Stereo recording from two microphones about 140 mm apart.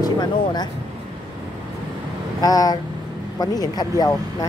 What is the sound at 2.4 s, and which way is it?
Vehicle, 25° left (ahead or behind).